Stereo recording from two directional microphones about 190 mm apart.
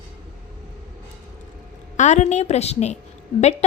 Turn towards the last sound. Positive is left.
turn(degrees=35)  # may be behind; listen again after turning